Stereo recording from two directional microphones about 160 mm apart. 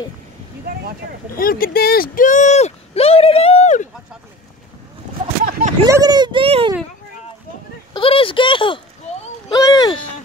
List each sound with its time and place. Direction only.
1.3 s speech: 65° left (ahead or behind); by 3.9 s 50° left (ahead or behind)
5.5 s a sound: 55° right (ahead or behind)
5.9 s speech: 25° right (ahead or behind)
7.9 s speech: 35° left (ahead or behind)